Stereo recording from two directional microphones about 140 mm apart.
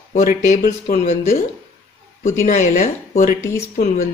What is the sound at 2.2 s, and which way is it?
Speech, 60° left (ahead or behind).